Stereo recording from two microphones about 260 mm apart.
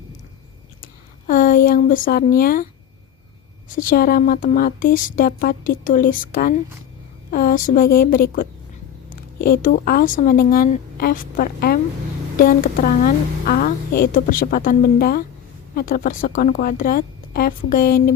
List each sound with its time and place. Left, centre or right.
1.3 s a woman's voice: left
3.8 s a woman's voice: left